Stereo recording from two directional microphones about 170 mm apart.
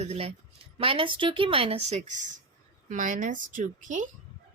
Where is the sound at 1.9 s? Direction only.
45° right (ahead or behind).